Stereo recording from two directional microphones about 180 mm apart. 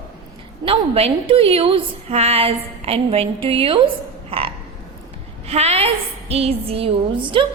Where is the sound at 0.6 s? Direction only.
30° right (ahead or behind).